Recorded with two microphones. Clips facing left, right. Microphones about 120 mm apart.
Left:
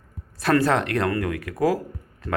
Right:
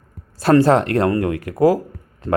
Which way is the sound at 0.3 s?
30° right (ahead or behind).